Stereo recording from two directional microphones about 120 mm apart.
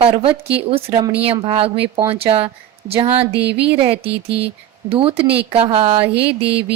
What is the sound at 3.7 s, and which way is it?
Speech, 50° right (ahead or behind).